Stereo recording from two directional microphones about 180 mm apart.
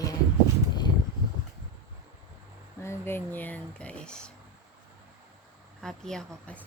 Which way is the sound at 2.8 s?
10° left (ahead or behind).